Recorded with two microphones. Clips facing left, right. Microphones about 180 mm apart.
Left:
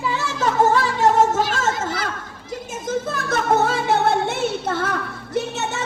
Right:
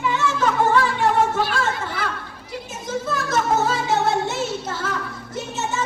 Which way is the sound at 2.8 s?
55° left (ahead or behind).